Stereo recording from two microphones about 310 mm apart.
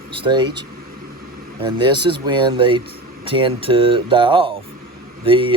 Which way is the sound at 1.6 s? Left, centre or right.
Centre.